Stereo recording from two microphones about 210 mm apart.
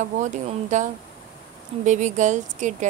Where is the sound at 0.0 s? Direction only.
35° right (ahead or behind).